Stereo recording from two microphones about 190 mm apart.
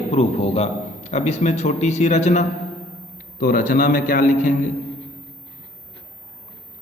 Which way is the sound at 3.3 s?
45° left (ahead or behind).